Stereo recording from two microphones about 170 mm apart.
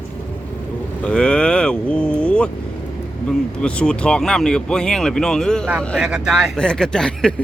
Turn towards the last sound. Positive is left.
turn(degrees=5)  # may be behind; listen again after turning